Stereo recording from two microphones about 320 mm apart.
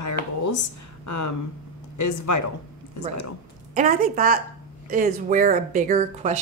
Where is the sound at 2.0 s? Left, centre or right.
Left.